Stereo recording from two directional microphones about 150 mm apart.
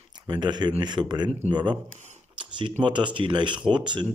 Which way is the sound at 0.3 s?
30° right (ahead or behind).